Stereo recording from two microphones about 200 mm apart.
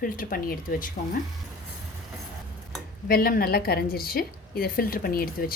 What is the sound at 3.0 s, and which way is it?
A woman's voice, 50° left (ahead or behind).